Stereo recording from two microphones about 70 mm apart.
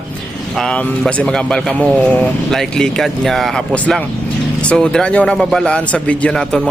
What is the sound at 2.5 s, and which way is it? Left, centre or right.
Speech, centre.